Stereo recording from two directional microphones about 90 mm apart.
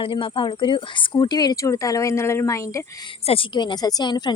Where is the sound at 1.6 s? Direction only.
35° left (ahead or behind).